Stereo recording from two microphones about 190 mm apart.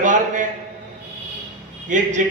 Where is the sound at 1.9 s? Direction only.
40° right (ahead or behind).